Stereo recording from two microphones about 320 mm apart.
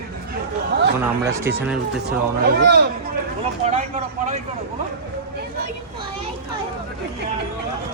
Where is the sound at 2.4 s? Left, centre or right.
Right.